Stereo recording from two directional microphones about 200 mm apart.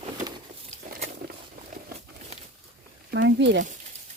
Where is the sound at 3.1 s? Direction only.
60° right (ahead or behind).